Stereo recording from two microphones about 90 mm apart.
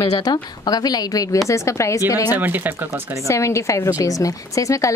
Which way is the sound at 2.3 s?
20° right (ahead or behind).